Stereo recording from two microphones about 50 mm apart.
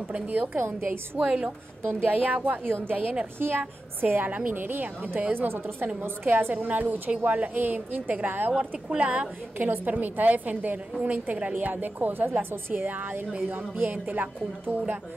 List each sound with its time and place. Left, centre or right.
0.1 s a woman's voice: right
0.6 s a woman's voice: right
1.2 s a woman's voice: centre
1.9 s a woman's voice: right
5.3 s a woman's voice: right
8.5 s speech: right
9.6 s a woman's voice: right